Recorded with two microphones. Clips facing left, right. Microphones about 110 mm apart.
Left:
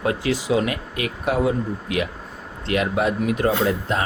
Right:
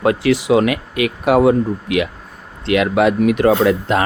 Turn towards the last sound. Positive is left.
turn(degrees=-80)